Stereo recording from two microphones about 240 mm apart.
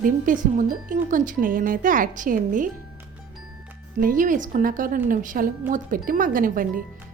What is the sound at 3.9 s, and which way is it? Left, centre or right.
A woman's voice, right.